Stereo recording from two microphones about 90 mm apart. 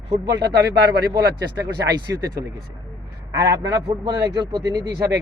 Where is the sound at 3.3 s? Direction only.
40° right (ahead or behind).